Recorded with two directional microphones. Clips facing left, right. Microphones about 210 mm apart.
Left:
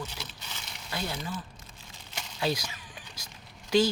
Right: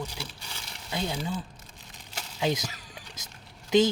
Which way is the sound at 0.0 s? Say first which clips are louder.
Right 3 dB; 10° right (ahead or behind).